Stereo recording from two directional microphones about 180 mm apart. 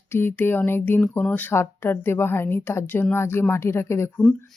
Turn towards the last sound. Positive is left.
turn(degrees=10)  # may be behind; listen again after turning